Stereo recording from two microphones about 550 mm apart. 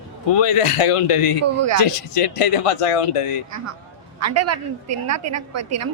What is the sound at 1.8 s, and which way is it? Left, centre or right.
Speech, left.